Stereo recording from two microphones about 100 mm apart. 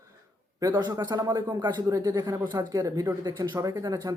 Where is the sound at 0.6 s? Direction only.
45° right (ahead or behind).